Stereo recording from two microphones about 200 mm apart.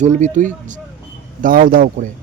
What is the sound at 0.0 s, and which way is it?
Speech, 35° right (ahead or behind).